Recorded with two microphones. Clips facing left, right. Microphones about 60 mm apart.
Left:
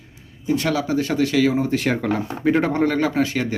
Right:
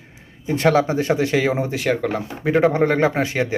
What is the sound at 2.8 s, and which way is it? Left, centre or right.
Speech, right.